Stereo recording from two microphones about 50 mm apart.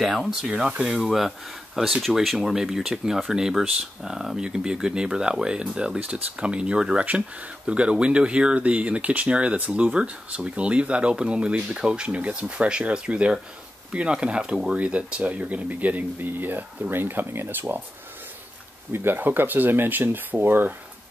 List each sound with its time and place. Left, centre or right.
0.0 s speech: centre; by 17.7 s right
18.9 s speech: right
19.1 s speech: right